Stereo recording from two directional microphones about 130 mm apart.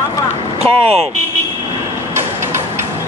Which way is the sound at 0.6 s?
50° right (ahead or behind).